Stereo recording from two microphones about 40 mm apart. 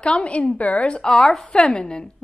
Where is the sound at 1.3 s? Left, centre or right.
Centre.